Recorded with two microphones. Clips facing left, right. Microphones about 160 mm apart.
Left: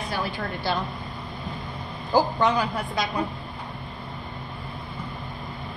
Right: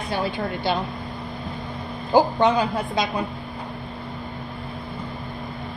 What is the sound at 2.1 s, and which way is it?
Speech, 25° right (ahead or behind).